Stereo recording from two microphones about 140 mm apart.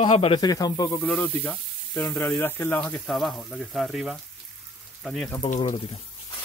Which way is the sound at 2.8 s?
5° left (ahead or behind).